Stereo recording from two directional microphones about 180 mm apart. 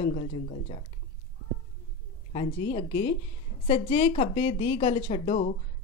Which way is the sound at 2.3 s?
25° left (ahead or behind).